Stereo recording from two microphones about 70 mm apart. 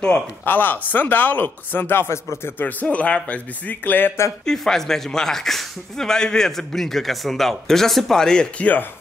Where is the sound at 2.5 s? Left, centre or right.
Left.